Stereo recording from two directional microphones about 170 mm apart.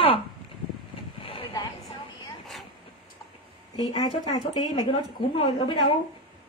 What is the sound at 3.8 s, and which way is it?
A woman's voice, 25° left (ahead or behind).